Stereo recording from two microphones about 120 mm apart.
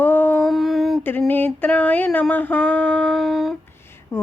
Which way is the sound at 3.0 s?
Centre (ahead or behind).